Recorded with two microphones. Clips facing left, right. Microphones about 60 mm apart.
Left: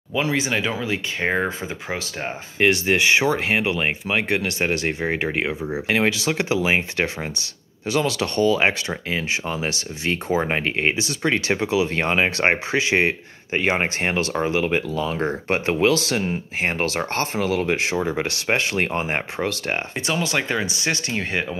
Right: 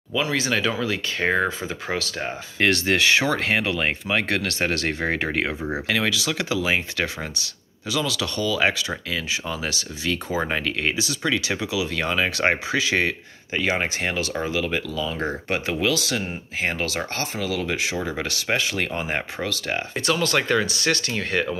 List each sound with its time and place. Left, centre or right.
0.1 s speech: left
5.9 s speech: left
7.9 s speech: left
20.1 s speech: centre